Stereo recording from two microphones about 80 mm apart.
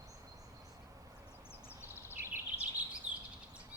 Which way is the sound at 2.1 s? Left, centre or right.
Right.